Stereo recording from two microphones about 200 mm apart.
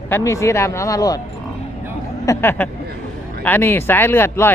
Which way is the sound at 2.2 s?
15° left (ahead or behind).